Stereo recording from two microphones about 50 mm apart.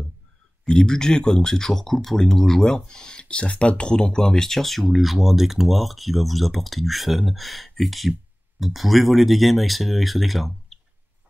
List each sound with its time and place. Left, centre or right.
0.7 s speech: centre